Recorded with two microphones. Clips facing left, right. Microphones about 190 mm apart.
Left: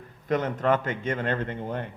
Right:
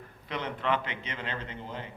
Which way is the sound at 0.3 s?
45° left (ahead or behind).